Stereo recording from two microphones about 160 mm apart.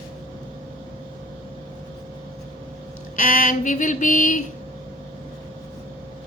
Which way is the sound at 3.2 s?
55° left (ahead or behind).